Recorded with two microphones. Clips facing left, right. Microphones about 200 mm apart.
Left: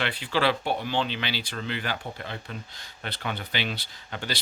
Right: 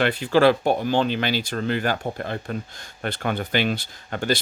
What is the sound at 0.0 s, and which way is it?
Speech, 45° right (ahead or behind).